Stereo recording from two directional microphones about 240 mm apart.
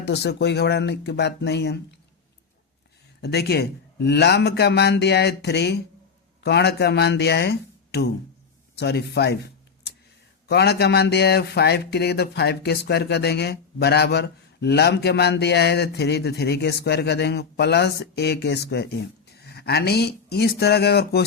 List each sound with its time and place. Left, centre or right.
0.0 s a man's voice: left
3.2 s a man's voice: left
8.7 s a sound: left
10.5 s a man's voice: left